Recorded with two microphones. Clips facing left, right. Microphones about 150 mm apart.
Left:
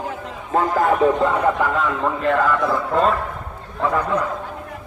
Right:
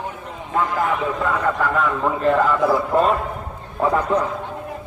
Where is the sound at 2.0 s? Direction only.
5° right (ahead or behind).